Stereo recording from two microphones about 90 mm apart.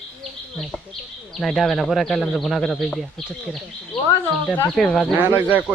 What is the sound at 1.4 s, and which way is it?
Speech, 5° left (ahead or behind).